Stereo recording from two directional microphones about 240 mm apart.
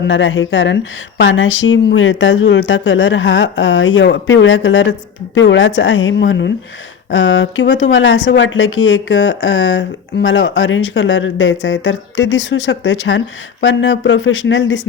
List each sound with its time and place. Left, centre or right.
0.1 s speech: left